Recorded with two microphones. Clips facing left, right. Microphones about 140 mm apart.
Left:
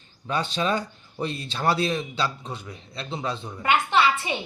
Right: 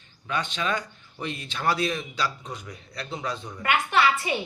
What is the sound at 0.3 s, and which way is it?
Speech, 35° left (ahead or behind).